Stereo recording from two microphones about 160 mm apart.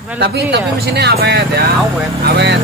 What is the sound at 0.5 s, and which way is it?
Speech, 90° right.